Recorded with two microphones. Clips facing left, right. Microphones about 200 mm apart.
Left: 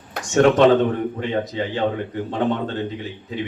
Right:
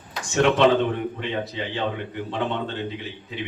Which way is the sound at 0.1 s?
45° left (ahead or behind).